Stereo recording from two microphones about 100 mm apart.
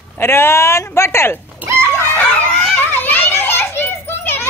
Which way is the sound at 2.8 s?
20° left (ahead or behind).